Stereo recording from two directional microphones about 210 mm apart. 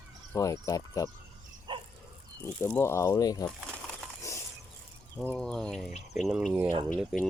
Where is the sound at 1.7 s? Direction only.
20° right (ahead or behind).